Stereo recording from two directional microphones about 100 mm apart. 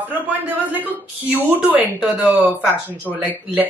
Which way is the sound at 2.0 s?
15° right (ahead or behind).